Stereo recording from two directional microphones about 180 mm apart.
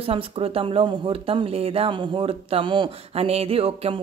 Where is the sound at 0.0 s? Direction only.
30° right (ahead or behind).